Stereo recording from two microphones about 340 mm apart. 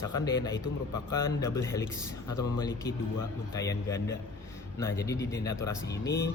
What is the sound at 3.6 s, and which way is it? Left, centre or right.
Speech, centre.